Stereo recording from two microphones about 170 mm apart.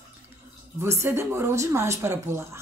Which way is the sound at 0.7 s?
15° right (ahead or behind).